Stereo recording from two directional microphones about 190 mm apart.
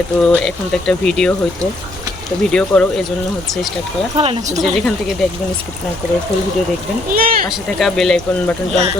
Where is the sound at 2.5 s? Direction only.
5° left (ahead or behind).